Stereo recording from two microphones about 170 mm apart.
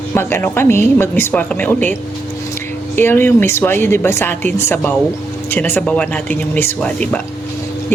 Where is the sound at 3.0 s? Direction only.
15° left (ahead or behind).